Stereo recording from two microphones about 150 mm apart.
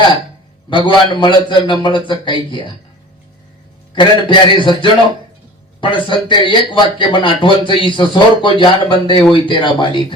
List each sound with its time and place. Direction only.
0.9 s a man's voice: 30° left (ahead or behind)
3.9 s a man's voice: 35° left (ahead or behind)